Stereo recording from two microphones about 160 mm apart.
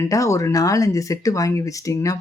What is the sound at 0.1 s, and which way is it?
Speech, 20° left (ahead or behind).